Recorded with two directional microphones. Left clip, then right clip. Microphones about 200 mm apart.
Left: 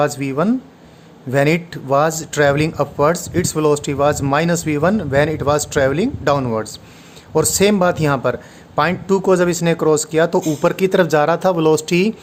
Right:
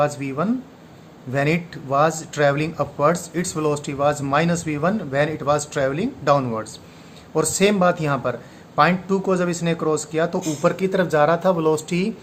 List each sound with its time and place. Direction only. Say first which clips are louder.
0.0 s speech: left 4 dB; 50° left (ahead or behind)